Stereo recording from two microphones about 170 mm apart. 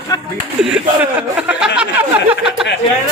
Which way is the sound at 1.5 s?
5° right (ahead or behind).